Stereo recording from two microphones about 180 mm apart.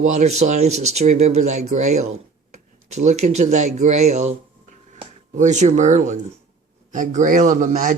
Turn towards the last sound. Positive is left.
turn(degrees=-50)  # may be behind; listen again after turning